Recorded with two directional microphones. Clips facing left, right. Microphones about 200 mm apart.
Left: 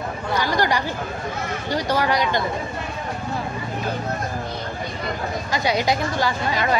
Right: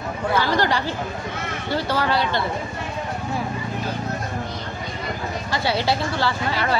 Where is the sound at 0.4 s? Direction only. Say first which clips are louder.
Left 1 dB; 15° left (ahead or behind).